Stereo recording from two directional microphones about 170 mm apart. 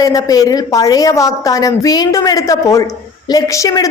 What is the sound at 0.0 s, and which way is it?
A woman's voice, 20° left (ahead or behind).